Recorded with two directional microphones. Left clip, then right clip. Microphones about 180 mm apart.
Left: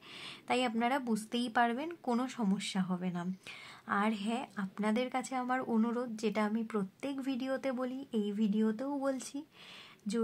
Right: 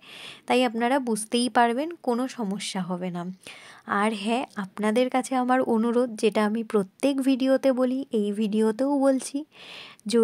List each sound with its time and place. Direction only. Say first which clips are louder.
0.2 s a woman's voice: right 10 dB; 35° right (ahead or behind)
2.0 s speech: right 7 dB; 25° right (ahead or behind)
2.5 s a woman's voice: right 7 dB; 35° right (ahead or behind)